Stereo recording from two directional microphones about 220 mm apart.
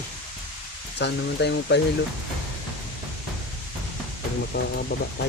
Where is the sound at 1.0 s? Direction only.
50° left (ahead or behind).